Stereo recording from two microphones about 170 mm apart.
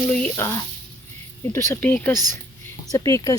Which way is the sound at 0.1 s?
10° left (ahead or behind).